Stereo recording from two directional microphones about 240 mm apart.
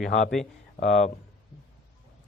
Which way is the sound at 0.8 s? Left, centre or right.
Left.